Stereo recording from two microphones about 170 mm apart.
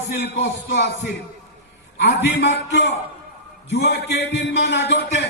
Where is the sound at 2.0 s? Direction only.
85° left.